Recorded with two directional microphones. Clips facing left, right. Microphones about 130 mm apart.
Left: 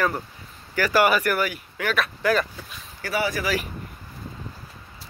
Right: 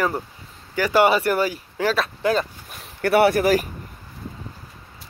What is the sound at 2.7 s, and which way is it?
Speech, 60° right (ahead or behind).